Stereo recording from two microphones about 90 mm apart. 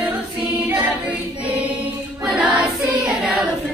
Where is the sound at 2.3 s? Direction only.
10° right (ahead or behind).